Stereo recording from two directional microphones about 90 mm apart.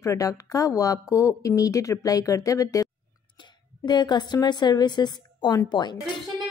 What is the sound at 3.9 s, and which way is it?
A woman's voice, 50° left (ahead or behind).